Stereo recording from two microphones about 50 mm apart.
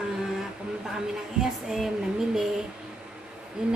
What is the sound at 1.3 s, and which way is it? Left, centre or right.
Female singing, centre.